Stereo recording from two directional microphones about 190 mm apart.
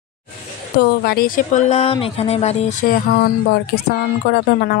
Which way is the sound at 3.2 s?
55° left (ahead or behind).